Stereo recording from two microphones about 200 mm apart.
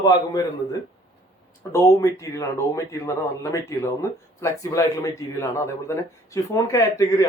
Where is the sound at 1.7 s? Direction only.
15° left (ahead or behind).